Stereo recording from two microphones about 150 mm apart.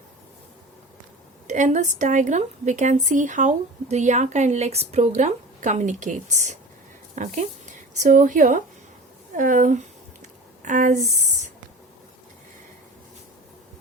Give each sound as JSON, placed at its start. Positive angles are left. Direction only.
{"t": 1.5, "sound": "speech", "side_deg": -55}